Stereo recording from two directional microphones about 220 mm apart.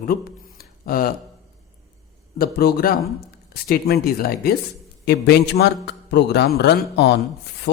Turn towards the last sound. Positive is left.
turn(degrees=50)  # may be behind; listen again after turning